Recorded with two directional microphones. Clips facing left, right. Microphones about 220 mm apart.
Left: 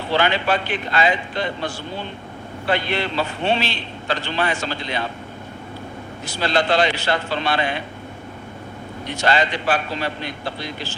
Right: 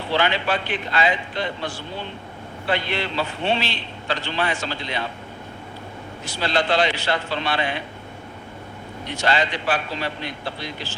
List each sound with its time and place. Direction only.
0.1 s a man's voice: 45° left (ahead or behind)
6.4 s a man's voice: 45° left (ahead or behind)
9.1 s a man's voice: 45° left (ahead or behind)